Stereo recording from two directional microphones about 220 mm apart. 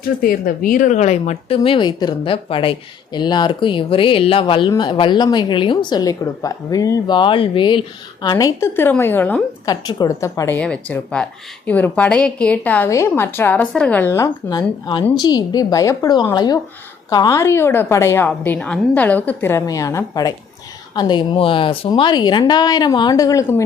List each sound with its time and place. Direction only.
0.0 s a woman's voice: 40° left (ahead or behind); by 23.6 s 15° left (ahead or behind)